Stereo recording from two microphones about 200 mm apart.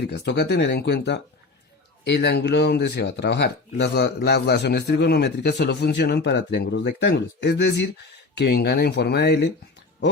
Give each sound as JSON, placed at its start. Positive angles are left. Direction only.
{"t": 0.0, "sound": "speech", "side_deg": 55}